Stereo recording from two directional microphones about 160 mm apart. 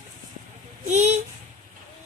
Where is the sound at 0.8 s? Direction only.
45° right (ahead or behind).